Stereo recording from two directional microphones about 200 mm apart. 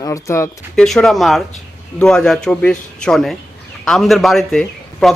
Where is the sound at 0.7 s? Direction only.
Centre (ahead or behind).